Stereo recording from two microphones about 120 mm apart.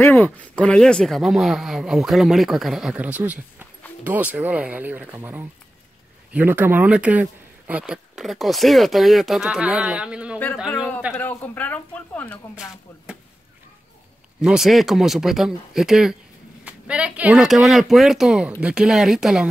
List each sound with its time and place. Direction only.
0.0 s speech: 20° left (ahead or behind)
0.6 s speech: 10° left (ahead or behind); by 10.4 s 10° right (ahead or behind)
11.1 s speech: 15° left (ahead or behind)
14.4 s speech: 5° right (ahead or behind)